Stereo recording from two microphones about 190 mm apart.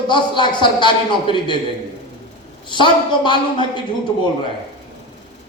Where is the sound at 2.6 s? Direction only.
25° left (ahead or behind).